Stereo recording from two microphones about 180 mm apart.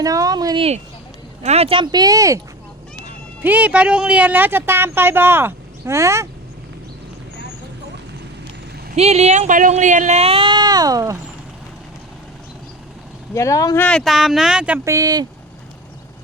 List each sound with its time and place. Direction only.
0.0 s speech: 20° right (ahead or behind)
3.4 s speech: 10° right (ahead or behind)
9.0 s speech: 35° right (ahead or behind); by 11.2 s 20° right (ahead or behind)
13.3 s speech: 15° left (ahead or behind)
13.8 s speech: centre (ahead or behind)
14.8 s speech: 20° right (ahead or behind)